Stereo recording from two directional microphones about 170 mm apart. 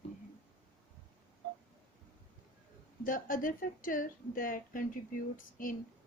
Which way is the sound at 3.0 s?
55° left (ahead or behind).